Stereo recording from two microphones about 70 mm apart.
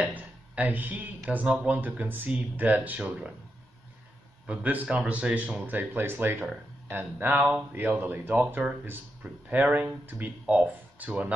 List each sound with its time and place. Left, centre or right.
0.0 s a sound: right
1.3 s speech: centre
4.5 s speech: centre